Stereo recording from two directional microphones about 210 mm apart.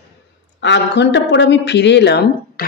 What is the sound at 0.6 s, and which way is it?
Speech, 55° left (ahead or behind).